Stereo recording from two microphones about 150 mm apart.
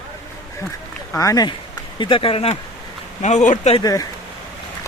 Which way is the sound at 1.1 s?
20° left (ahead or behind).